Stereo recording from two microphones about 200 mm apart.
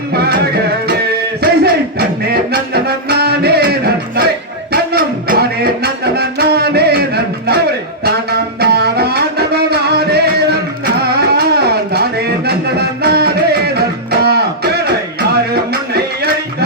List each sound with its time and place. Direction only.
0.1 s music: 50° right (ahead or behind)